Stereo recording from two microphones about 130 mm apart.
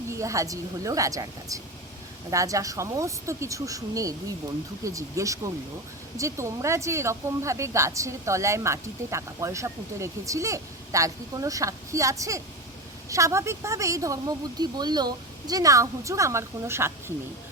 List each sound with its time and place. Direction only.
0.1 s speech: 25° right (ahead or behind)